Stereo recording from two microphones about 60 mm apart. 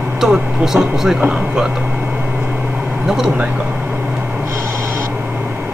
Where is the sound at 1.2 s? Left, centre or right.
Centre.